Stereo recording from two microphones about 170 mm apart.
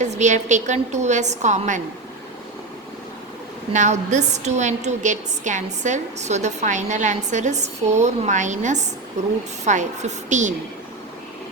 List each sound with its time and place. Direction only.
0.0 s a woman's voice: 45° right (ahead or behind)
3.7 s a woman's voice: 45° right (ahead or behind)